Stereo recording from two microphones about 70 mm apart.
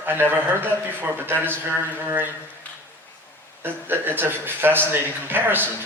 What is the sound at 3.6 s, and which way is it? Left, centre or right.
A man's voice, right.